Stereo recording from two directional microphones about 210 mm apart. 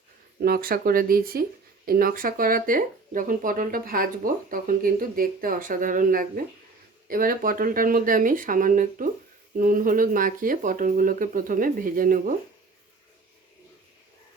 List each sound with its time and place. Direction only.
0.4 s speech: 45° right (ahead or behind)